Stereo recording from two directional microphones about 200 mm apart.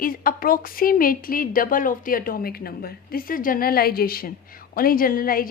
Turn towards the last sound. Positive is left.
turn(degrees=45)  # may be behind; listen again after turning